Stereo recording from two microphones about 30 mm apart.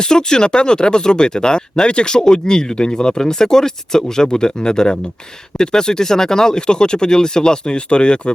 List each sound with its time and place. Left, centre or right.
0.0 s speech: left